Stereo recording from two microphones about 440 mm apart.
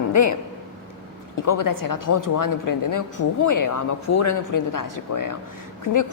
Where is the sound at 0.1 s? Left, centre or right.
Left.